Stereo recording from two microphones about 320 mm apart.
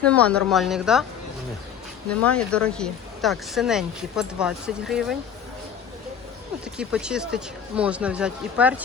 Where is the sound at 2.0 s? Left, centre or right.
Centre.